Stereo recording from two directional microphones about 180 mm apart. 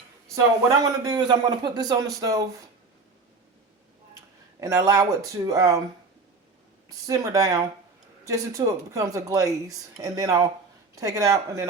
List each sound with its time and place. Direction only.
0.3 s speech: 20° right (ahead or behind)
4.6 s speech: 15° right (ahead or behind)
6.8 s speech: 20° right (ahead or behind)